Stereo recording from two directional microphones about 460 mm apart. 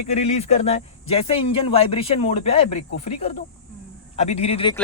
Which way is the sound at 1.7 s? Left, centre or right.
Centre.